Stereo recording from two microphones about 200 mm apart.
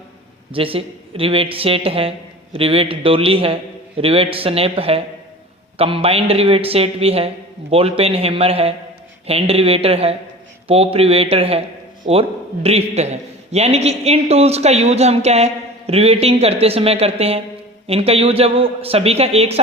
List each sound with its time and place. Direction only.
0.5 s a woman's voice: 25° right (ahead or behind)